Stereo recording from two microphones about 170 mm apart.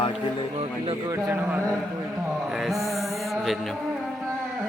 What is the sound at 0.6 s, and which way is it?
Speech, 35° right (ahead or behind).